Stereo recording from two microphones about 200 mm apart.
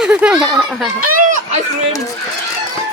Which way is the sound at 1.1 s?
40° right (ahead or behind).